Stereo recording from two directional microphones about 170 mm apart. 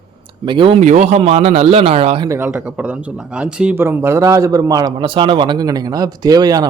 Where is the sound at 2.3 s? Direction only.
10° right (ahead or behind).